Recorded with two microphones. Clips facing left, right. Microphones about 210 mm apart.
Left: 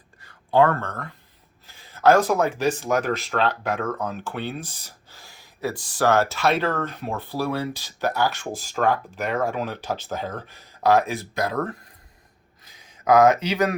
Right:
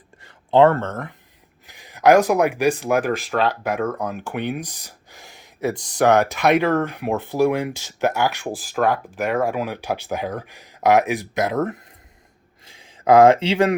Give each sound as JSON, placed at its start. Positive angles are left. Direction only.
{"t": 0.2, "sound": "speech", "side_deg": -25}
{"t": 3.0, "sound": "speech", "side_deg": -50}
{"t": 3.3, "sound": "speech", "side_deg": -10}